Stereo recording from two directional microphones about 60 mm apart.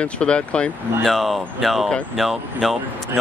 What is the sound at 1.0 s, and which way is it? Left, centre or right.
Speech, centre.